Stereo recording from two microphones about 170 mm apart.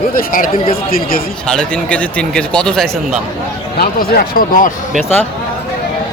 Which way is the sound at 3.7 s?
65° left (ahead or behind).